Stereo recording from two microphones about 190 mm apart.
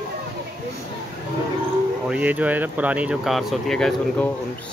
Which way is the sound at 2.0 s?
5° right (ahead or behind).